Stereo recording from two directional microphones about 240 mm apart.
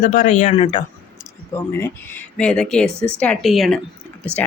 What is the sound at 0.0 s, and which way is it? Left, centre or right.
Speech, left.